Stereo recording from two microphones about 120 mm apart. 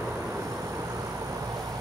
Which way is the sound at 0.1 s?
20° right (ahead or behind).